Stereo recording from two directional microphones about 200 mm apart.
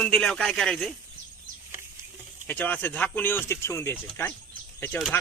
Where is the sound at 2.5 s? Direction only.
10° left (ahead or behind).